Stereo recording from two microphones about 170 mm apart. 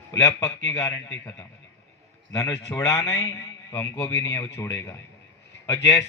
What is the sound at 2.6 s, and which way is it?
A man's voice, 15° left (ahead or behind).